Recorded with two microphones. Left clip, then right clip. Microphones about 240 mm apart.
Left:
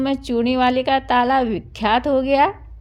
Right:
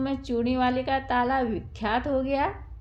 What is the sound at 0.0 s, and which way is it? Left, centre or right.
A woman's voice, left.